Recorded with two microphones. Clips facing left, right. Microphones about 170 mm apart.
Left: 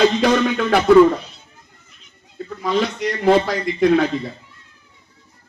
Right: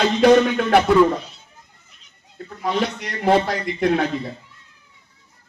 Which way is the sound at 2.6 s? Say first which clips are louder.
Left 2 dB; 60° right (ahead or behind).